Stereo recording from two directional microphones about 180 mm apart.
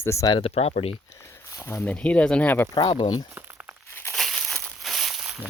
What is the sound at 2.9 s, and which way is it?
Speech, 25° left (ahead or behind).